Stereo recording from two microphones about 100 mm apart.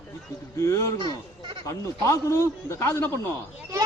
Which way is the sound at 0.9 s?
55° right (ahead or behind).